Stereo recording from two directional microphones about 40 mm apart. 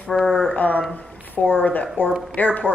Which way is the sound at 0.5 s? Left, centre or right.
Left.